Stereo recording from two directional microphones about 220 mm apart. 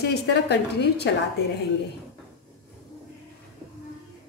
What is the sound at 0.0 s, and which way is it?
A woman's voice, 50° left (ahead or behind).